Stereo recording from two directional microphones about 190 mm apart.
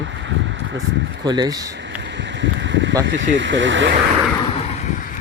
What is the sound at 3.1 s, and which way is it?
Speech, 75° right (ahead or behind).